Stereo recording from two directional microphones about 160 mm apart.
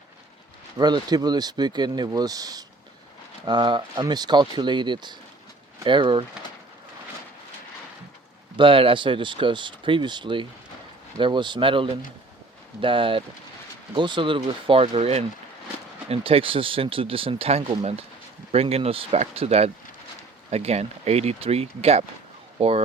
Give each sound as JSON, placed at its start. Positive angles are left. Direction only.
{"t": 0.8, "sound": "speech", "side_deg": -25}
{"t": 8.5, "sound": "speech", "side_deg": -35}